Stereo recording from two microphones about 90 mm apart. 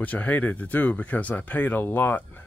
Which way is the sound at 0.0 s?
20° left (ahead or behind).